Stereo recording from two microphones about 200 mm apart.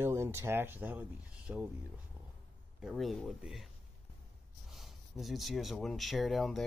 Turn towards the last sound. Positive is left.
turn(degrees=0)  # may be behind; listen again after turning